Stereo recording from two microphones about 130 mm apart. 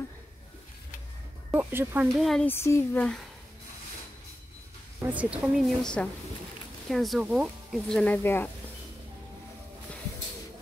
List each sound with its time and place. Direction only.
1.5 s speech: 15° right (ahead or behind)
2.1 s speech: centre (ahead or behind)
2.4 s speech: 20° left (ahead or behind)
5.0 s speech: 10° right (ahead or behind)
8.0 s speech: 15° left (ahead or behind)